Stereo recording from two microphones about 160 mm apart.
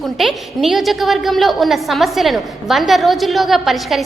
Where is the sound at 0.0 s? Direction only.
Centre (ahead or behind).